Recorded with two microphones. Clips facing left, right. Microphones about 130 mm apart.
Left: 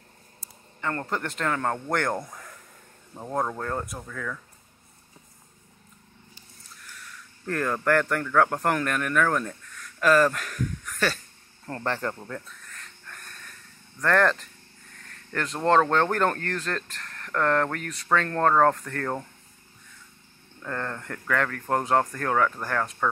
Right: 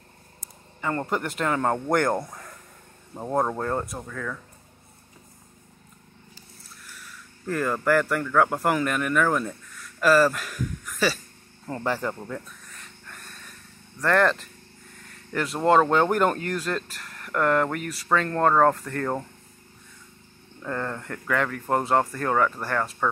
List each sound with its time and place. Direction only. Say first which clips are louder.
0.7 s speech: right 3 dB; 10° right (ahead or behind)
3.2 s speech: right 4 dB; 15° right (ahead or behind)
6.8 s speech: left 1 dB; 5° right (ahead or behind)
11.6 s a sound: right 2 dB; 5° right (ahead or behind)
14.0 s speech: right 1 dB; centre (ahead or behind)
20.6 s speech: right 2 dB; 5° right (ahead or behind)